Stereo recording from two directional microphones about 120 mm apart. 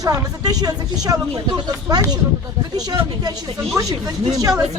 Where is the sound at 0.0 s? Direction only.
30° right (ahead or behind).